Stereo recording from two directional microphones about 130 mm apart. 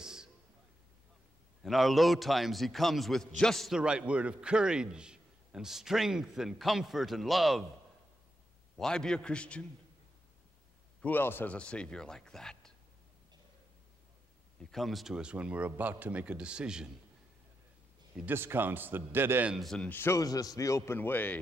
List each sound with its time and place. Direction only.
0.0 s a sound: 5° right (ahead or behind)
1.6 s a man's voice: centre (ahead or behind)
8.7 s speech: 5° left (ahead or behind)
11.0 s speech: 15° left (ahead or behind)
14.6 s a man's voice: centre (ahead or behind)
18.1 s a man's voice: 15° right (ahead or behind)
19.5 s a man's voice: centre (ahead or behind)
19.9 s a man's voice: 20° left (ahead or behind)